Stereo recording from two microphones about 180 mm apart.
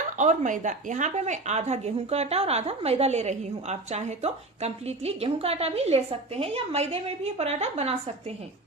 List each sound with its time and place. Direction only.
0.2 s a woman's voice: 45° right (ahead or behind)